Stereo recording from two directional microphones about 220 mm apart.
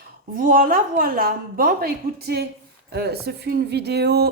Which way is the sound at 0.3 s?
40° right (ahead or behind).